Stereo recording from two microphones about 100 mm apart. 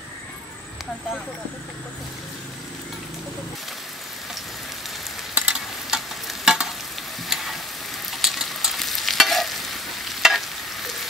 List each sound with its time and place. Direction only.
5.3 s stir: 10° right (ahead or behind)
7.2 s frying: centre (ahead or behind)
8.1 s stir: centre (ahead or behind)